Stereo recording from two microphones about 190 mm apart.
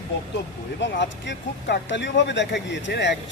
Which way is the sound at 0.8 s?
70° left (ahead or behind).